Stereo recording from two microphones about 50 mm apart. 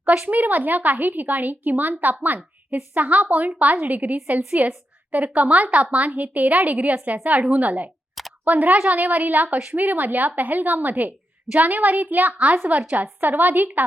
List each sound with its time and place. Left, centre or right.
0.0 s speech: right